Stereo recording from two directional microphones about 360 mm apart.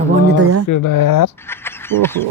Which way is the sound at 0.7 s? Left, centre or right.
Left.